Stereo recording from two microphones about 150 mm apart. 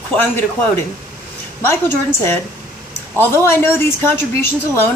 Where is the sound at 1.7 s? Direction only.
15° left (ahead or behind).